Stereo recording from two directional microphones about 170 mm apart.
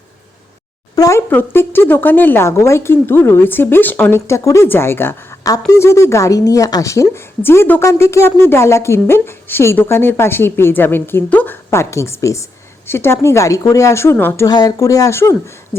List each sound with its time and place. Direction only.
0.9 s speech: 20° left (ahead or behind)